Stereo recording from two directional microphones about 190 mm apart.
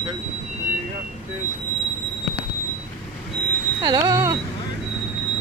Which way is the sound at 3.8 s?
20° right (ahead or behind).